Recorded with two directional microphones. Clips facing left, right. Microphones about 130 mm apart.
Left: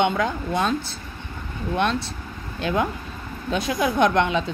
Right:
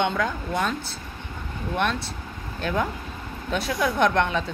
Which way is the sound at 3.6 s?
15° left (ahead or behind).